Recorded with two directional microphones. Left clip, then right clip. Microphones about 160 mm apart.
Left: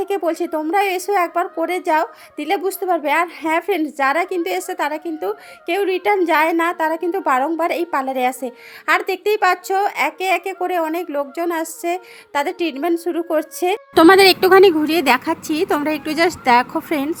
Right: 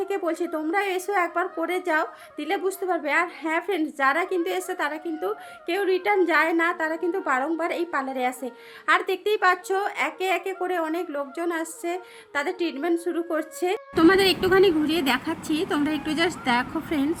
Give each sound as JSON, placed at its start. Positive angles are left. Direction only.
{"t": 0.0, "sound": "a woman's voice", "side_deg": 35}
{"t": 13.9, "sound": "a woman's voice", "side_deg": 50}